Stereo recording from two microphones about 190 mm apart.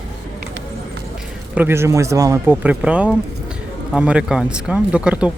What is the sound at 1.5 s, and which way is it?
Speech, 10° right (ahead or behind).